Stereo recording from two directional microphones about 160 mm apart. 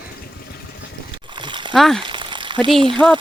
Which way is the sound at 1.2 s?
30° right (ahead or behind).